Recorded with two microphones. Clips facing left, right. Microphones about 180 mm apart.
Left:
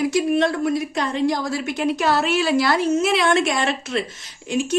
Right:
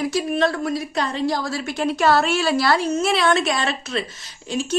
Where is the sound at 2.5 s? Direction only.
20° left (ahead or behind).